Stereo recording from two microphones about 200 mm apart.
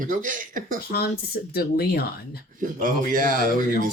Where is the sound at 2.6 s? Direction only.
40° right (ahead or behind).